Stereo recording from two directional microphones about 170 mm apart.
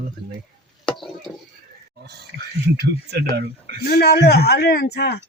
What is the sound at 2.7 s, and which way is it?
Speech, 75° right (ahead or behind).